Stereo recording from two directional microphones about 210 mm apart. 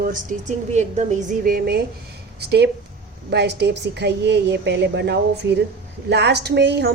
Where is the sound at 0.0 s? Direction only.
40° right (ahead or behind).